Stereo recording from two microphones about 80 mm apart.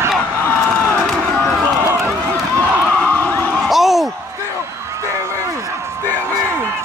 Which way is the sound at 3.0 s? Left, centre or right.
Left.